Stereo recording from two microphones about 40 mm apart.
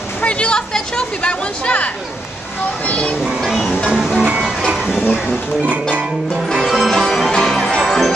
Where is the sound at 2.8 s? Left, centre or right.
Left.